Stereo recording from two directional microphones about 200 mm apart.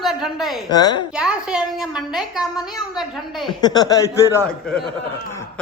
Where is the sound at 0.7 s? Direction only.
20° left (ahead or behind).